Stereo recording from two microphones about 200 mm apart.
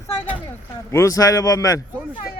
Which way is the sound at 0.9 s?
15° left (ahead or behind).